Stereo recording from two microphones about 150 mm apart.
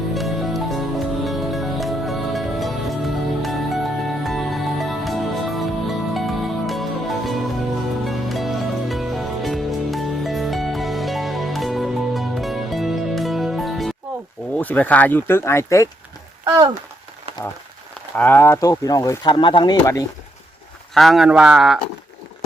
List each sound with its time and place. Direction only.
0.1 s music: centre (ahead or behind)
14.5 s speech: 10° left (ahead or behind)
16.4 s speech: 25° right (ahead or behind)
18.2 s speech: 15° left (ahead or behind); by 19.7 s 30° left (ahead or behind)
19.8 s speech: 20° left (ahead or behind)
20.9 s speech: centre (ahead or behind)